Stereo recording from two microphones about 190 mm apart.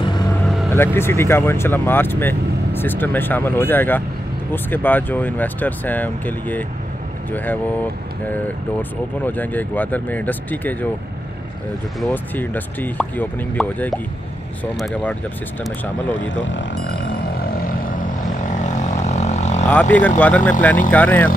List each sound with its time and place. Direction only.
0.7 s speech: 15° left (ahead or behind)
9.2 s speech: 10° left (ahead or behind)
12.0 s speech: 10° left (ahead or behind)
16.1 s speech: 80° left
18.6 s vehicle: 40° left (ahead or behind)
19.7 s speech: 10° left (ahead or behind)